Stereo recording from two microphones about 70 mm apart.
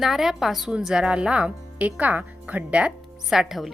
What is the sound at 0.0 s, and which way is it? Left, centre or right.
Speech, centre.